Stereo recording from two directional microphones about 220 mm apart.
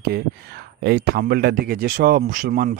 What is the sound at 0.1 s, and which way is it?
Speech, 45° right (ahead or behind).